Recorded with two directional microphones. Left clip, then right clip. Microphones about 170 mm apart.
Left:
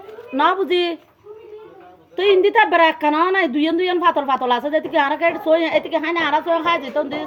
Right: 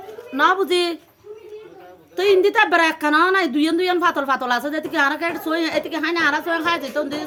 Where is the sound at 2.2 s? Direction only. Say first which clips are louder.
Left 1 dB; 30° right (ahead or behind).